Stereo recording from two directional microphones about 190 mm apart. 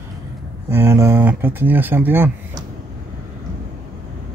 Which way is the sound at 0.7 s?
15° right (ahead or behind).